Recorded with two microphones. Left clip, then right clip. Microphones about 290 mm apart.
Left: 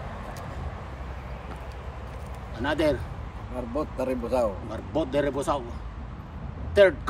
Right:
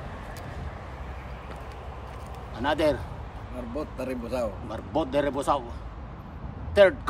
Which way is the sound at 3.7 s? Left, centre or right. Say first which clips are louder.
Left 4 dB; centre.